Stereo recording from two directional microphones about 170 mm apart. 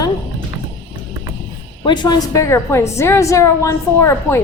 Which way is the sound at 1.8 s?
25° left (ahead or behind).